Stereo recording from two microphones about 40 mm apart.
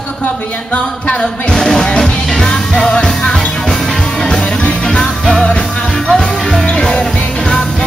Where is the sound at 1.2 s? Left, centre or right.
Centre.